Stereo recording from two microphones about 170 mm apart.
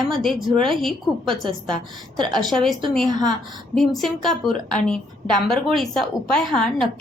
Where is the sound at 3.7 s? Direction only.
Centre (ahead or behind).